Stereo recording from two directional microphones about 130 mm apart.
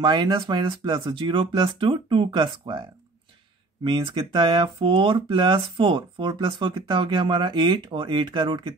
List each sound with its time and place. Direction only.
0.0 s speech: 35° right (ahead or behind)